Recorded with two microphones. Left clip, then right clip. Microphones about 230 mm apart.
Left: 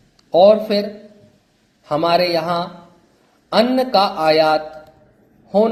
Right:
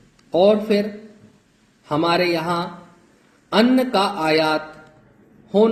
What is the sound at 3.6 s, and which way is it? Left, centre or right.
Speech, left.